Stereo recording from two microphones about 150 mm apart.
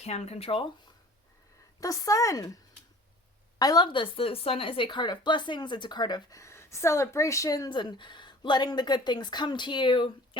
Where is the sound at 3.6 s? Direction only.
25° left (ahead or behind).